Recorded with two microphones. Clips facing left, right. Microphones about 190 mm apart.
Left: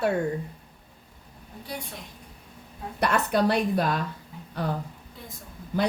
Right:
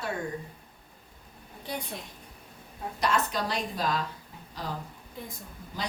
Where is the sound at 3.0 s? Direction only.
60° left (ahead or behind).